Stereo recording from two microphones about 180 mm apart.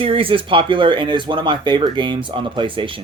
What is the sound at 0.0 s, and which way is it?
Speech, 30° right (ahead or behind).